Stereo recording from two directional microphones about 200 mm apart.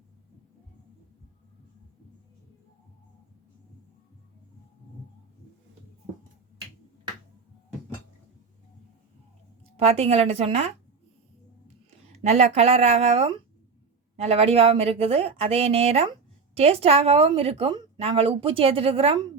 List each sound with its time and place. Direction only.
9.7 s speech: 30° right (ahead or behind)
12.3 s a woman's voice: 30° right (ahead or behind)